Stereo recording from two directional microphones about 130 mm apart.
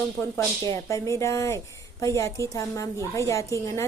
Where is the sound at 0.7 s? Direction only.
25° left (ahead or behind).